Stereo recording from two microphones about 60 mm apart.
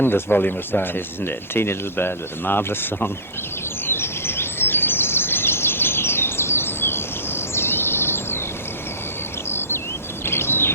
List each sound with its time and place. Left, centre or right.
0.0 s speech: left
3.8 s bird vocalization: left
9.5 s a sound: left
10.2 s bird: left